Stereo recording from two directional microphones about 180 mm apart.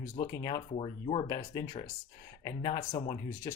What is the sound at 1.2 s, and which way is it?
Speech, 20° left (ahead or behind).